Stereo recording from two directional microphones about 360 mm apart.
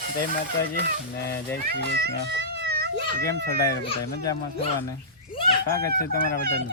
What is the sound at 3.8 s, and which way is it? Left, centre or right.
Speech, centre.